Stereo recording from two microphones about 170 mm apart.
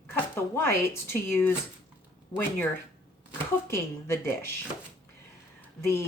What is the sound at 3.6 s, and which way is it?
Speech, 15° left (ahead or behind).